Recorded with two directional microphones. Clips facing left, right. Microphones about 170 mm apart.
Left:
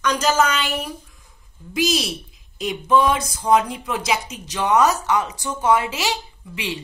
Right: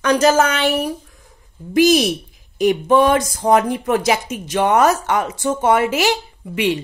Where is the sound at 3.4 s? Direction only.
30° right (ahead or behind).